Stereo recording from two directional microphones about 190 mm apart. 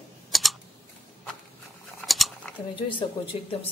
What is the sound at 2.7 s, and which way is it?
Speech, 25° left (ahead or behind).